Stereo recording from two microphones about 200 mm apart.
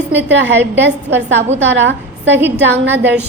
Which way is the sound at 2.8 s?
10° right (ahead or behind).